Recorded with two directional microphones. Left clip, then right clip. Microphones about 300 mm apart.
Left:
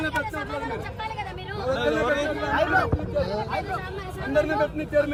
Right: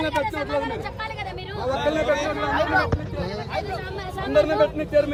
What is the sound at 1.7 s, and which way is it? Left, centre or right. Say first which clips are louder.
Speech: right 1 dB; centre.